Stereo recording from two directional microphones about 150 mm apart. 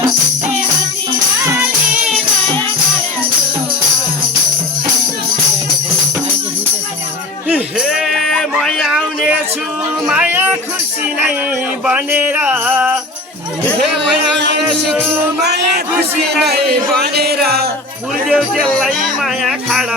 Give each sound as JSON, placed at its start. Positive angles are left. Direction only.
{"t": 7.4, "sound": "music", "side_deg": -10}
{"t": 7.9, "sound": "a sound", "side_deg": 0}
{"t": 10.1, "sound": "music", "side_deg": -10}
{"t": 11.9, "sound": "a sound", "side_deg": -10}
{"t": 15.4, "sound": "speech", "side_deg": -90}
{"t": 18.3, "sound": "speech", "side_deg": 0}